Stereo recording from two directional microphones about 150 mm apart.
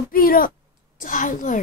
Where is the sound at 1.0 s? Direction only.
60° left (ahead or behind).